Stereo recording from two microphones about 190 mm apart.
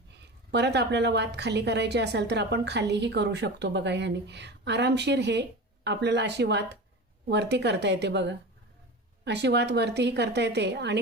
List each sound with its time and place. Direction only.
0.5 s a woman's voice: 60° right (ahead or behind)